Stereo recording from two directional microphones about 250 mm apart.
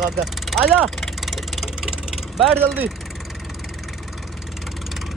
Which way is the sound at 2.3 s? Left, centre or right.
Centre.